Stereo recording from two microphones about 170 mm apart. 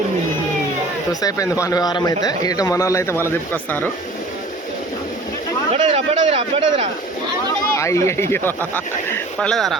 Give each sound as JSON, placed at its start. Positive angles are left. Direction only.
{"t": 1.2, "sound": "a man's voice", "side_deg": 20}
{"t": 5.7, "sound": "speech", "side_deg": -40}
{"t": 7.8, "sound": "speech", "side_deg": 15}